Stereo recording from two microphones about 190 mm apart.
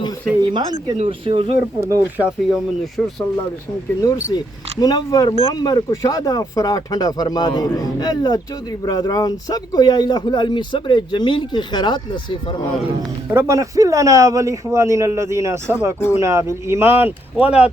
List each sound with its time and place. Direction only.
0.5 s speech: 20° right (ahead or behind)
1.8 s speech: 10° right (ahead or behind)
3.0 s a man's voice: 15° left (ahead or behind)
13.2 s speech: 15° right (ahead or behind)